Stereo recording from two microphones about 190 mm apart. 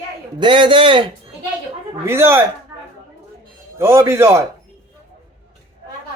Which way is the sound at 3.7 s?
15° right (ahead or behind).